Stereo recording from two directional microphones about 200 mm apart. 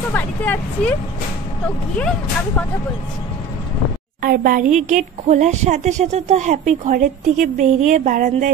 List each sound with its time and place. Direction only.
0.1 s speech: 10° left (ahead or behind)
4.2 s a woman's voice: 45° right (ahead or behind)